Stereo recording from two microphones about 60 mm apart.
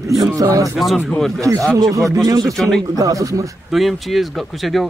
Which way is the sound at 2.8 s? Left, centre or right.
Right.